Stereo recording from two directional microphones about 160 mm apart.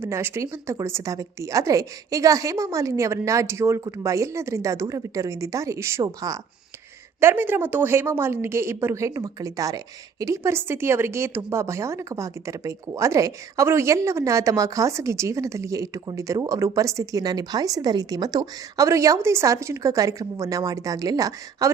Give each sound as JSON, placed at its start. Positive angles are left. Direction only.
{"t": 0.0, "sound": "speech", "side_deg": -15}